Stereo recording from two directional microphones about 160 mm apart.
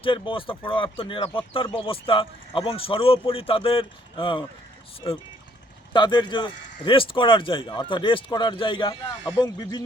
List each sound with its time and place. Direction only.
0.0 s speech: 35° left (ahead or behind)